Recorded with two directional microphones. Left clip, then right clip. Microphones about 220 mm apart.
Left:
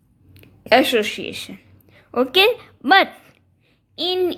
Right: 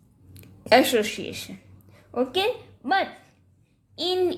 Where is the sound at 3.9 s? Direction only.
15° left (ahead or behind).